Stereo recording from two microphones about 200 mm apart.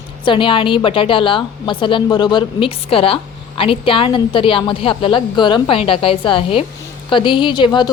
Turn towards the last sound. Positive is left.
turn(degrees=20)  # may be behind; listen again after turning